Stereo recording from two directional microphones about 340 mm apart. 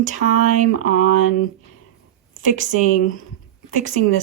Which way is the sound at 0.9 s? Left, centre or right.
Left.